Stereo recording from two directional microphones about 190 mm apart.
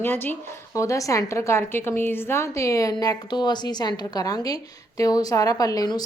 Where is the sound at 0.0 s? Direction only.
10° left (ahead or behind).